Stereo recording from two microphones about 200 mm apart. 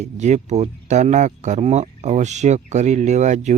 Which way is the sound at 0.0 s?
35° right (ahead or behind).